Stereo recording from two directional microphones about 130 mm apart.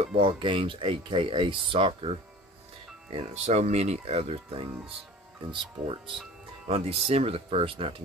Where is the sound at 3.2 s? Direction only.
60° right (ahead or behind).